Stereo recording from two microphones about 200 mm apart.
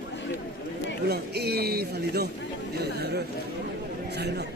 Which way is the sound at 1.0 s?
55° right (ahead or behind).